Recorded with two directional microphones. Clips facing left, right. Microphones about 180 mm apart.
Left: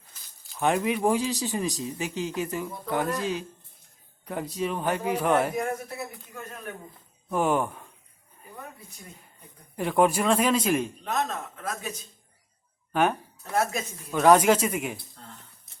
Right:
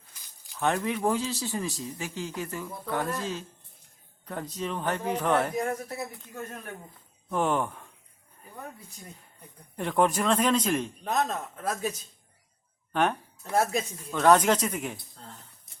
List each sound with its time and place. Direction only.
0.6 s a man's voice: 15° left (ahead or behind)
7.3 s a man's voice: 10° left (ahead or behind)
9.7 s a man's voice: 5° left (ahead or behind)
11.0 s a man's voice: 35° right (ahead or behind)
12.9 s a man's voice: 5° left (ahead or behind)